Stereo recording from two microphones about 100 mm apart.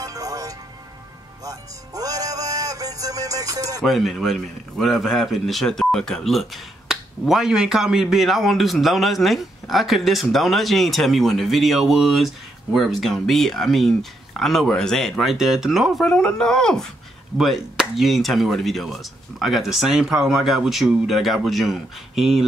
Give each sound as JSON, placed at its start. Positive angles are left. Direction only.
{"t": 0.0, "sound": "music", "side_deg": -35}
{"t": 3.8, "sound": "speech", "side_deg": 0}